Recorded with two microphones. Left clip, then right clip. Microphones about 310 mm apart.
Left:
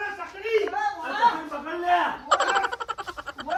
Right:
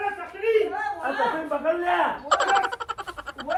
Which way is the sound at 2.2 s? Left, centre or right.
Centre.